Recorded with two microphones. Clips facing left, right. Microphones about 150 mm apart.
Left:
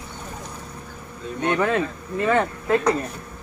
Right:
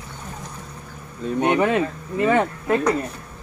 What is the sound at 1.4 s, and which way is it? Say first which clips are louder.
Speech: right 2 dB; 20° right (ahead or behind).